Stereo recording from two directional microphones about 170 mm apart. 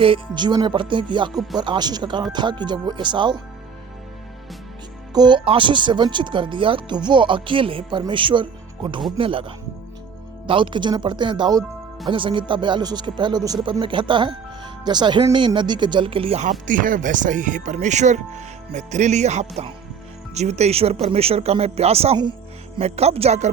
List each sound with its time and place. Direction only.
0.0 s speech: 30° right (ahead or behind)
5.1 s speech: 25° right (ahead or behind)